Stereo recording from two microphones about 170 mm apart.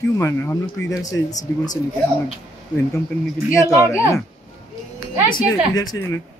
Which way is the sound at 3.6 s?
20° left (ahead or behind).